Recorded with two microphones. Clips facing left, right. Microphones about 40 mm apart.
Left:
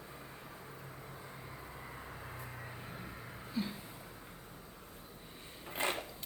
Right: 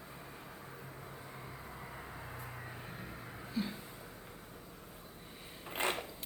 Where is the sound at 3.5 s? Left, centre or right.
Centre.